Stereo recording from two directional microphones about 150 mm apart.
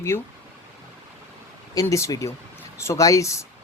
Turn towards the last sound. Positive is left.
turn(degrees=20)  # may be behind; listen again after turning